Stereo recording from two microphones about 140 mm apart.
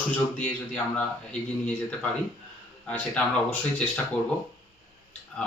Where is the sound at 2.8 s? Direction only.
10° left (ahead or behind).